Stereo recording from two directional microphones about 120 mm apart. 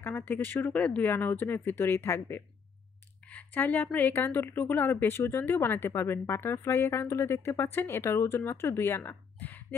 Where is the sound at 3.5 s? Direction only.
15° left (ahead or behind).